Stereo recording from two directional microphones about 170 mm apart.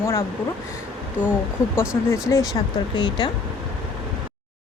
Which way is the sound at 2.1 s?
15° left (ahead or behind).